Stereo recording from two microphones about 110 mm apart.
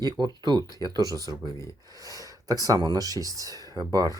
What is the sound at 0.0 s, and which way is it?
Speech, 40° right (ahead or behind).